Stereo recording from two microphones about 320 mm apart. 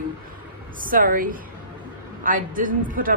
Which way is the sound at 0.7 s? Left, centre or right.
Right.